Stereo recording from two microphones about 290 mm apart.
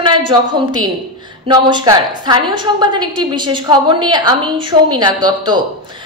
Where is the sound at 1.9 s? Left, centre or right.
Centre.